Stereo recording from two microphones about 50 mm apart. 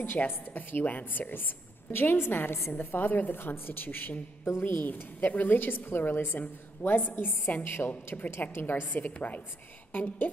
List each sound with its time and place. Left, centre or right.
0.0 s a woman's voice: left
8.8 s a woman's voice: left